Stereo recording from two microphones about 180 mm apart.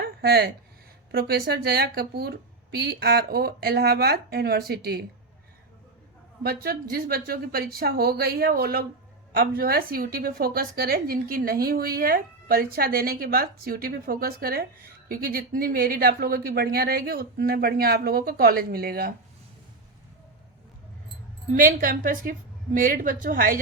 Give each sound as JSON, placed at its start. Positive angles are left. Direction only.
{"t": 0.0, "sound": "a sound", "side_deg": -60}
{"t": 1.1, "sound": "a woman's voice", "side_deg": -55}
{"t": 6.4, "sound": "a woman's voice", "side_deg": -55}
{"t": 21.5, "sound": "a woman's voice", "side_deg": -50}